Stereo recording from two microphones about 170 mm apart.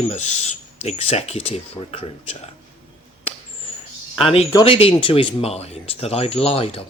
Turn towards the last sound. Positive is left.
turn(degrees=35)  # may be behind; listen again after turning